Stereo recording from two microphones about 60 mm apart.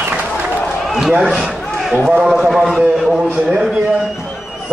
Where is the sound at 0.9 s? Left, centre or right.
Centre.